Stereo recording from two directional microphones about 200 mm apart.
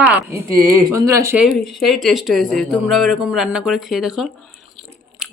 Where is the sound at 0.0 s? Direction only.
5° right (ahead or behind).